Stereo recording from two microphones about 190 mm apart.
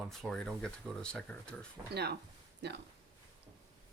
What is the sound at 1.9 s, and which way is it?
Speech, 60° right (ahead or behind).